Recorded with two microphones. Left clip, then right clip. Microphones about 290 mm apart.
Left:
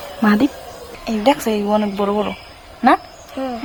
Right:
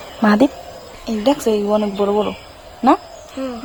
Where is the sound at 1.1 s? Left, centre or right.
Centre.